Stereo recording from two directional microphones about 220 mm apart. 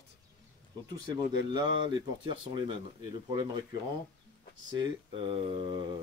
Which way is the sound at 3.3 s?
20° right (ahead or behind).